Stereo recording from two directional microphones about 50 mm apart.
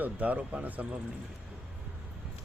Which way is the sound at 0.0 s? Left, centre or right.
Right.